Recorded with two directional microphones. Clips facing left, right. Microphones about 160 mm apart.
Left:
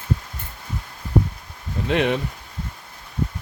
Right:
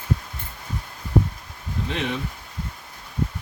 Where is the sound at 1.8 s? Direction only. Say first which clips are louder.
Left 8 dB; 65° left (ahead or behind).